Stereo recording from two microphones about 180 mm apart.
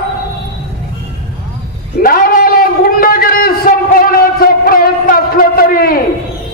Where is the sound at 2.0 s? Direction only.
55° left (ahead or behind).